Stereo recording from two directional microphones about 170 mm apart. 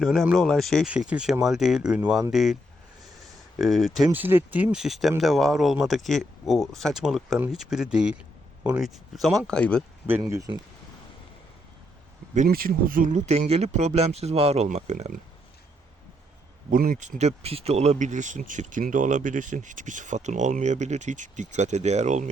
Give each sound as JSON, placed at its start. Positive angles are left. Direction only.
{"t": 0.0, "sound": "speech", "side_deg": 0}
{"t": 3.6, "sound": "speech", "side_deg": 0}
{"t": 10.1, "sound": "speech", "side_deg": -15}
{"t": 12.3, "sound": "speech", "side_deg": -50}
{"t": 16.7, "sound": "speech", "side_deg": -55}